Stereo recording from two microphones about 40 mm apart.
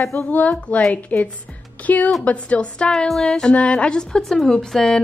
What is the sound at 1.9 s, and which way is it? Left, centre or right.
Speech, left.